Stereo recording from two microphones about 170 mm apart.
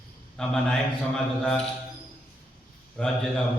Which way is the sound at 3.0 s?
5° left (ahead or behind).